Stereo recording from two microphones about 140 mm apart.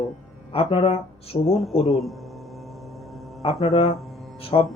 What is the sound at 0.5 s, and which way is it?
Speech, 45° left (ahead or behind).